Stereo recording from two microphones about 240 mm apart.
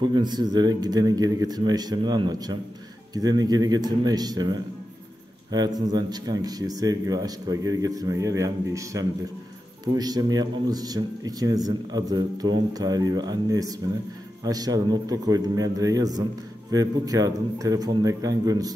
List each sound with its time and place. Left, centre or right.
0.0 s a man's voice: centre